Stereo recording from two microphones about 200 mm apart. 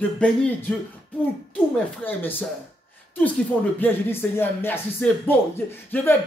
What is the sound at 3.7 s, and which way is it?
Speech, 10° left (ahead or behind).